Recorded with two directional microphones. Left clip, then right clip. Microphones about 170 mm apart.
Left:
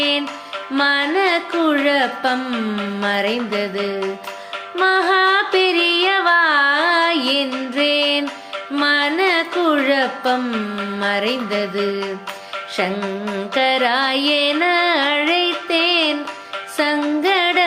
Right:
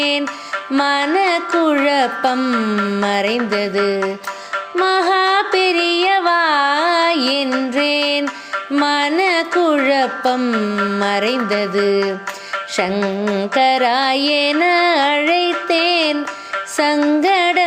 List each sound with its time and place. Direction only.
0.7 s music: 40° right (ahead or behind)